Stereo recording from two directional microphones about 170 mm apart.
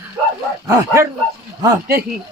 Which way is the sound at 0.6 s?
15° right (ahead or behind).